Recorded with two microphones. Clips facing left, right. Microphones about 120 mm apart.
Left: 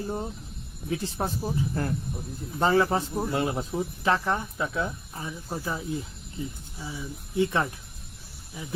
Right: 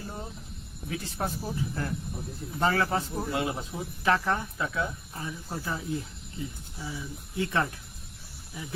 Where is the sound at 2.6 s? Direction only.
25° left (ahead or behind).